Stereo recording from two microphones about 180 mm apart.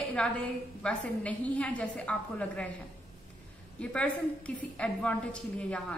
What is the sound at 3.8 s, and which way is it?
A woman's voice, 5° left (ahead or behind).